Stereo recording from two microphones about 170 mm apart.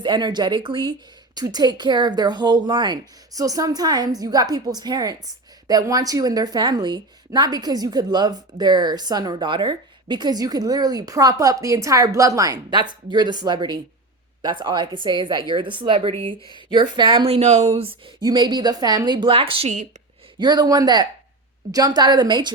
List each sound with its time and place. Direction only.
0.0 s a woman's voice: 25° right (ahead or behind); by 17.7 s 40° right (ahead or behind)
17.7 s a woman's voice: 30° right (ahead or behind)
20.4 s a woman's voice: 25° right (ahead or behind)